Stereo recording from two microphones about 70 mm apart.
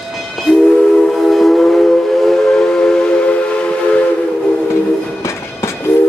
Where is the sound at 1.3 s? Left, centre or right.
Centre.